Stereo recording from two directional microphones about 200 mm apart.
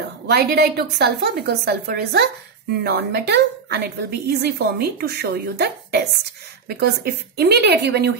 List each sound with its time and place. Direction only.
0.3 s a woman's voice: 55° right (ahead or behind)